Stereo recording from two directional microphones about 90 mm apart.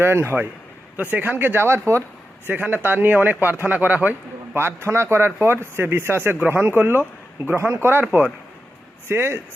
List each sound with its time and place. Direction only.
0.0 s speech: 25° right (ahead or behind)
9.0 s speech: 25° right (ahead or behind)